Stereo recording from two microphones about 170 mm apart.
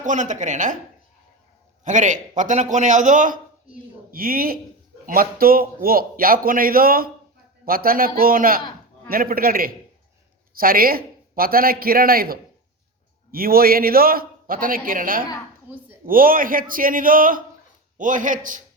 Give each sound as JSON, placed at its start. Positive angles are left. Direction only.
{"t": 0.0, "sound": "a man's voice", "side_deg": -45}
{"t": 1.8, "sound": "a man's voice", "side_deg": -45}